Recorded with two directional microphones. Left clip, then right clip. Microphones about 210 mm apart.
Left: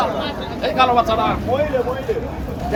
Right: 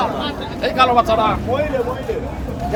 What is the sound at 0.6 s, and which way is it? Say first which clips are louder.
Speech: right 1 dB; 50° right (ahead or behind).